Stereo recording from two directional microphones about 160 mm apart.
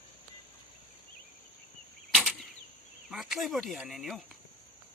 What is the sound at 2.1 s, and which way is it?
Arrow, 10° right (ahead or behind).